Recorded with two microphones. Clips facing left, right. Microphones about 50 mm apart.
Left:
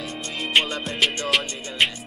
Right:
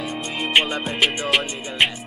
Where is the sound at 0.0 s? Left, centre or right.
Centre.